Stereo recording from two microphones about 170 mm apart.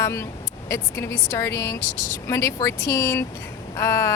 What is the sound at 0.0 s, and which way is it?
A woman's voice, 15° left (ahead or behind).